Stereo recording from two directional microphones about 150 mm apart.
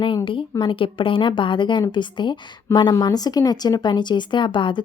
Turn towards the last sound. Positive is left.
turn(degrees=30)  # may be behind; listen again after turning